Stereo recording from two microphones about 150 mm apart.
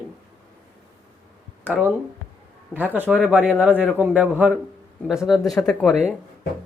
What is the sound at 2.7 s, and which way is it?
Speech, 10° right (ahead or behind).